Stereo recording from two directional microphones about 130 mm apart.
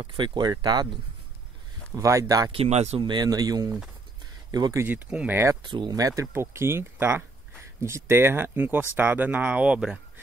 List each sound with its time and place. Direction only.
0.0 s speech: 40° right (ahead or behind)
2.0 s speech: 25° right (ahead or behind)
2.5 s speech: 55° right (ahead or behind)
3.0 s speech: 35° right (ahead or behind)
4.8 s speech: 10° right (ahead or behind)
5.6 s speech: 40° right (ahead or behind); by 9.9 s 5° right (ahead or behind)